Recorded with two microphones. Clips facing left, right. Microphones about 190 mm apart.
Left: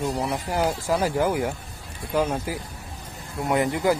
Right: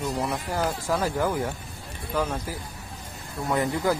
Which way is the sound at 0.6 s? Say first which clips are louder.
Left 3 dB; 15° left (ahead or behind).